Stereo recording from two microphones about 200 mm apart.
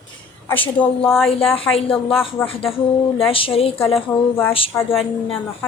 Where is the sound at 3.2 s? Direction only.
25° left (ahead or behind).